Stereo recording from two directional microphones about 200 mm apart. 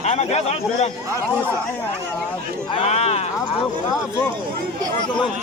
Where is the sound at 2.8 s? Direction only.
30° left (ahead or behind).